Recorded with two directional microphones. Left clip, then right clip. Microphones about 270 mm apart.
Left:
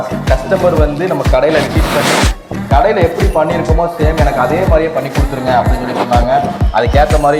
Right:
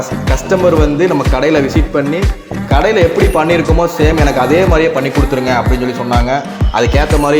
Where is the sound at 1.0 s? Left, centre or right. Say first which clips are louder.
Even; right.